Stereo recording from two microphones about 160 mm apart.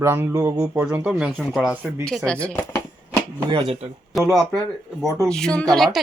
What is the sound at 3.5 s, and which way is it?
Speech, 35° right (ahead or behind).